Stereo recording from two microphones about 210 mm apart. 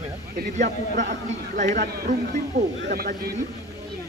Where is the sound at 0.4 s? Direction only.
35° right (ahead or behind).